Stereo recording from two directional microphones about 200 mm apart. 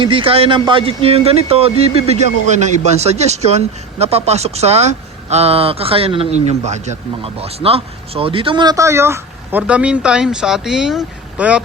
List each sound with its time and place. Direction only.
0.0 s speech: 25° right (ahead or behind); by 11.6 s 5° right (ahead or behind)